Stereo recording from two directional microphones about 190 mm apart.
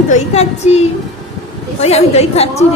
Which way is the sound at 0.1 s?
35° left (ahead or behind).